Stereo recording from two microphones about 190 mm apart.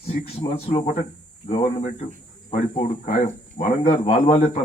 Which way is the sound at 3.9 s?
25° left (ahead or behind).